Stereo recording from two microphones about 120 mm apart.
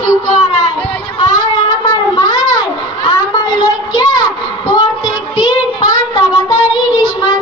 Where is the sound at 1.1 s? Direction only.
40° left (ahead or behind).